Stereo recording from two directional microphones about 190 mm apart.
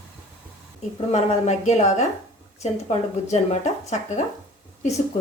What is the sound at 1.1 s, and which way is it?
Speech, 35° left (ahead or behind).